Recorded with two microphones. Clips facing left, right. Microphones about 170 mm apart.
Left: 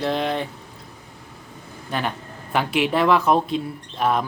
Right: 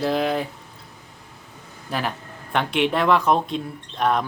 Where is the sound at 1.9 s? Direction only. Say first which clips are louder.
Left 1 dB; centre (ahead or behind).